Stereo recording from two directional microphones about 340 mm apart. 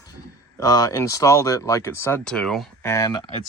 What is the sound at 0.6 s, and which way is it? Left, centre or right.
Speech, centre.